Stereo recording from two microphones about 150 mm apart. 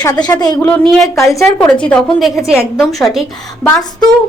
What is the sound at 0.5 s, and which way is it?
A woman's voice, 10° left (ahead or behind).